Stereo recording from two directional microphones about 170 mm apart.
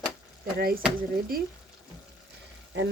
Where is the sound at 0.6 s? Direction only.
60° right (ahead or behind).